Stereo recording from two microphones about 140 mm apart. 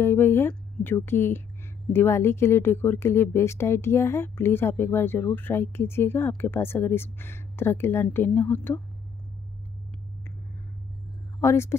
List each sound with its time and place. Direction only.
0.0 s speech: 15° left (ahead or behind)
11.4 s speech: 20° left (ahead or behind)